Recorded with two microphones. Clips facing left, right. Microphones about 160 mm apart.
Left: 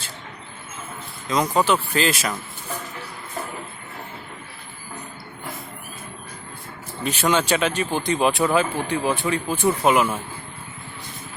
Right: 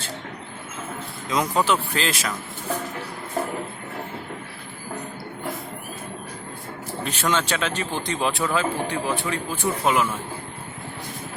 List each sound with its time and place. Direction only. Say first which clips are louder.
1.3 s speech: left 2 dB; centre (ahead or behind)
7.0 s speech: left 3 dB; 10° left (ahead or behind)